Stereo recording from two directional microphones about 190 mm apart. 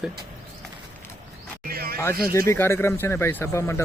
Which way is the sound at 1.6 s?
55° right (ahead or behind).